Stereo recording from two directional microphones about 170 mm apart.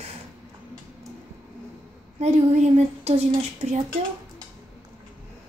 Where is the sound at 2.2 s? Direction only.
40° right (ahead or behind).